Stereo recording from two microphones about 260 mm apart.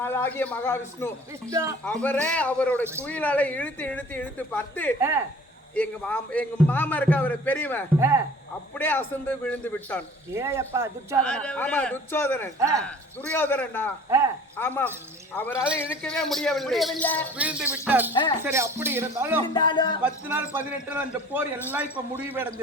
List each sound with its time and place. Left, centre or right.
0.0 s a man's voice: centre
1.5 s a man's voice: centre
1.8 s speech: centre
4.9 s a man's voice: centre
5.7 s a man's voice: centre
7.9 s a man's voice: centre
8.8 s a man's voice: centre
10.3 s a man's voice: centre
11.2 s speech: centre
12.5 s a man's voice: centre
12.8 s a man's voice: centre
17.3 s a man's voice: centre
19.5 s a man's voice: centre
20.0 s a man's voice: centre